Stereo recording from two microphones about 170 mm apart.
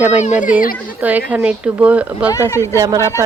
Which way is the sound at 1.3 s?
5° right (ahead or behind).